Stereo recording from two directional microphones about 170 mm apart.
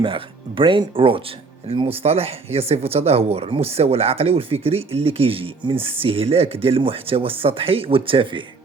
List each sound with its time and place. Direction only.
0.0 s speech: 30° right (ahead or behind)